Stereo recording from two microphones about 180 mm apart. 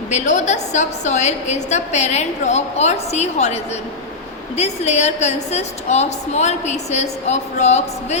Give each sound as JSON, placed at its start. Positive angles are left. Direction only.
{"t": 0.1, "sound": "a woman's voice", "side_deg": 40}